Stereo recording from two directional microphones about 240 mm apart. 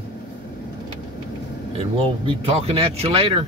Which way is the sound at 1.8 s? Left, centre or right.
Right.